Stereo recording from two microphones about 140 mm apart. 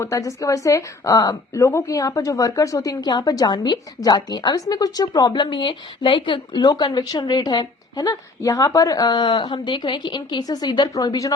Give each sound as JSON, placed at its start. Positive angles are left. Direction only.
{"t": 0.0, "sound": "a woman's voice", "side_deg": 25}